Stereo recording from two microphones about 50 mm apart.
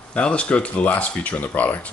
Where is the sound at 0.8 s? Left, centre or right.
Left.